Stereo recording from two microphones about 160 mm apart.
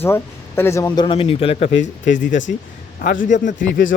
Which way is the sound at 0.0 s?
15° left (ahead or behind).